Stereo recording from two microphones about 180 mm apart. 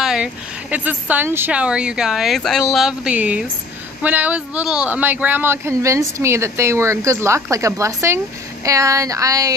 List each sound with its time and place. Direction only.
0.0 s speech: 5° right (ahead or behind)